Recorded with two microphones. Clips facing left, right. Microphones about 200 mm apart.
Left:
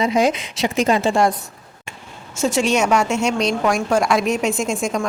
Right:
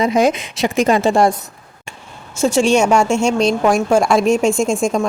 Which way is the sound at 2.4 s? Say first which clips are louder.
Right 4 dB; 30° right (ahead or behind).